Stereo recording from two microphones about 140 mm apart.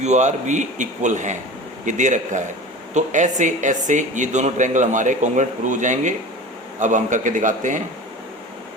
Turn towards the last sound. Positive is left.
turn(degrees=-65)  # may be behind; listen again after turning